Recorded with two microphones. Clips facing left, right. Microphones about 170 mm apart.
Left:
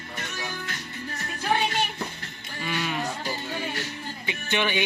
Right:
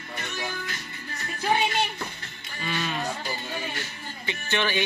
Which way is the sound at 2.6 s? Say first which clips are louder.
Left 1 dB; 15° left (ahead or behind).